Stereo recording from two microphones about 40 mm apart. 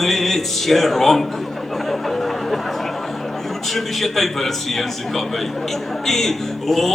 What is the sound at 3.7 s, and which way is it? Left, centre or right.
A man's voice, centre.